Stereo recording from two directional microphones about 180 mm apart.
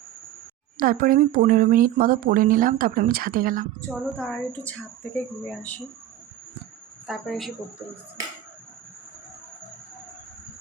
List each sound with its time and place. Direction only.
0.8 s speech: 50° right (ahead or behind)
3.8 s a woman's voice: 5° left (ahead or behind)
7.1 s speech: centre (ahead or behind)